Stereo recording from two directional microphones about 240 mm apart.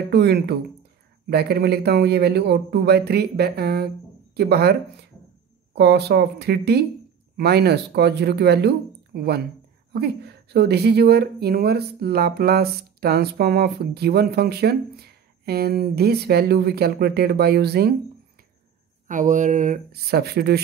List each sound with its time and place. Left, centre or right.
0.1 s speech: right
19.0 s speech: right